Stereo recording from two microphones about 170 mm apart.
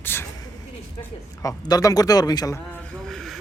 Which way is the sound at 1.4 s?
20° left (ahead or behind).